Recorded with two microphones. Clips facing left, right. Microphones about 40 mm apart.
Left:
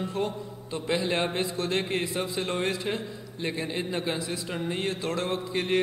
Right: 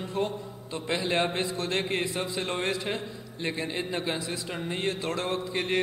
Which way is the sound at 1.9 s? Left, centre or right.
Right.